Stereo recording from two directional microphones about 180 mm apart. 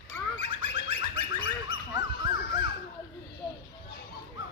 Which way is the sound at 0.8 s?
90° left.